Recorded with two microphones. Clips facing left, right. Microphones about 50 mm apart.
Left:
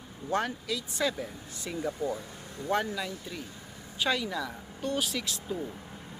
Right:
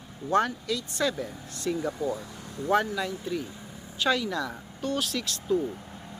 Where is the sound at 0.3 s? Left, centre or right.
Centre.